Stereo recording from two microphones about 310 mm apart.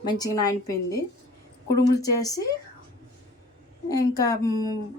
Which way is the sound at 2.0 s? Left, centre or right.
Centre.